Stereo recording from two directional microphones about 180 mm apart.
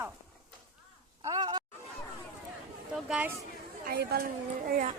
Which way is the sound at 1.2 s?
20° right (ahead or behind).